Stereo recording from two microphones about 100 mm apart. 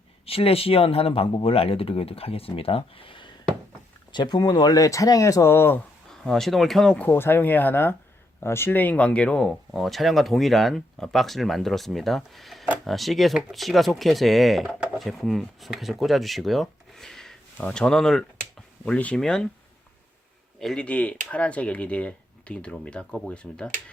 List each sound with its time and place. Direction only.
0.3 s speech: 70° left (ahead or behind)
4.1 s speech: 45° left (ahead or behind); by 5.8 s 25° left (ahead or behind)
6.1 s speech: 5° left (ahead or behind)
7.1 s speech: 20° left (ahead or behind); by 19.5 s 5° left (ahead or behind)
20.6 s speech: 5° left (ahead or behind)